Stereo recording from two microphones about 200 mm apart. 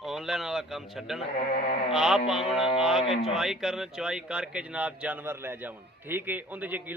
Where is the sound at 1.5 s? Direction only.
35° left (ahead or behind).